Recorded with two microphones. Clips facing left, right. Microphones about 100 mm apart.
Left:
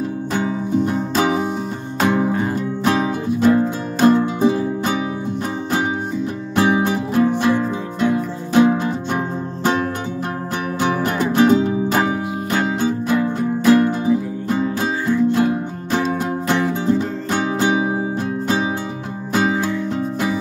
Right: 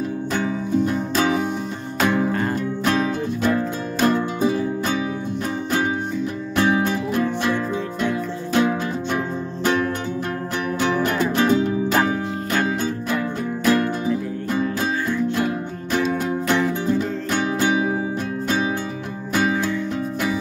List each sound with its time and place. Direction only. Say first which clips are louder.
0.3 s music: left 2 dB; 25° left (ahead or behind)
2.3 s music: left 2 dB; 10° left (ahead or behind)
2.8 s music: left 3 dB; 20° left (ahead or behind)
6.5 s music: left 3 dB; 25° left (ahead or behind)
11.9 s music: left 1 dB; 10° left (ahead or behind); by 17.9 s 25° left (ahead or behind)
19.5 s music: left 2 dB; 5° left (ahead or behind)